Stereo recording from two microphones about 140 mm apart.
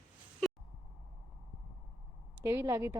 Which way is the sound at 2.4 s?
20° right (ahead or behind).